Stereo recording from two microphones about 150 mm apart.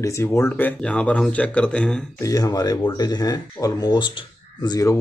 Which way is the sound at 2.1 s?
20° left (ahead or behind).